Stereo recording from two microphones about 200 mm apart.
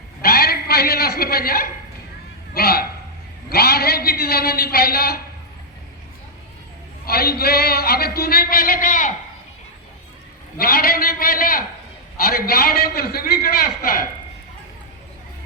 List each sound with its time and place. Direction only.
0.2 s a sound: 50° left (ahead or behind)
2.6 s a man's voice: 50° left (ahead or behind)
7.0 s a man's voice: 50° left (ahead or behind)
10.6 s a man's voice: 50° left (ahead or behind)